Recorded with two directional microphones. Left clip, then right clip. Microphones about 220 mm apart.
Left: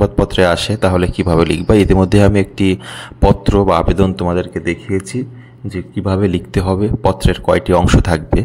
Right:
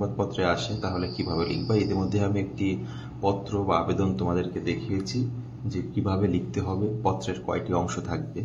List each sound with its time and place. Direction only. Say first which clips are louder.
0.0 s speech: left 14 dB; 50° left (ahead or behind)